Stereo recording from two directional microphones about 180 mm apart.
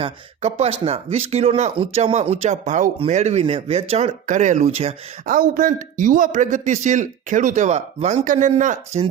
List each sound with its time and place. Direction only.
0.0 s speech: 35° right (ahead or behind)